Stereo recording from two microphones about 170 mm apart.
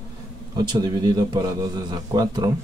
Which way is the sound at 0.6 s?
25° right (ahead or behind).